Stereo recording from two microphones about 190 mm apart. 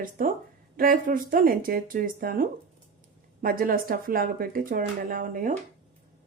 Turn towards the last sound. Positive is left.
turn(degrees=-45)  # may be behind; listen again after turning